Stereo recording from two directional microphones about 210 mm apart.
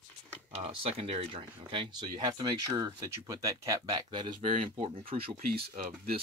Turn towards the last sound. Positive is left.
turn(degrees=-45)  # may be behind; listen again after turning